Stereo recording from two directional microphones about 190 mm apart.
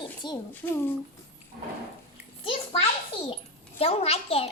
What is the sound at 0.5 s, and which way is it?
Speech, 10° left (ahead or behind).